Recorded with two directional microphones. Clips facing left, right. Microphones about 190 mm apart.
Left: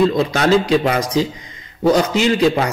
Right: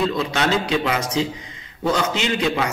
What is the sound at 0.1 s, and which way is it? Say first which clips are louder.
A man's voice: left 6 dB; 40° left (ahead or behind).